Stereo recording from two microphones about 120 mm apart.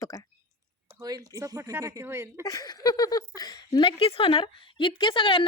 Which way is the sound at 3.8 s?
50° left (ahead or behind).